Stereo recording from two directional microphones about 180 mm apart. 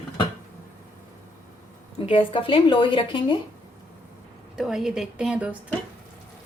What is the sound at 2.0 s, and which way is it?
Speech, 30° left (ahead or behind).